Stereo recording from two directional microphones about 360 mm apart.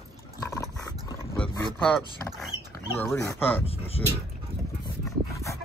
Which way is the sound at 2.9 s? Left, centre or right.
Centre.